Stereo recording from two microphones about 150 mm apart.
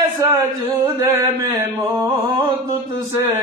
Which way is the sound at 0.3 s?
15° right (ahead or behind).